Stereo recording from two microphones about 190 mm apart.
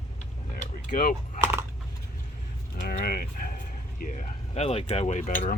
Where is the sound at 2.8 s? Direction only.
50° left (ahead or behind).